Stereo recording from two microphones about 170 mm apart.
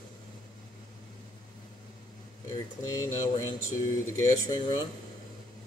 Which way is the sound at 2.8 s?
20° left (ahead or behind).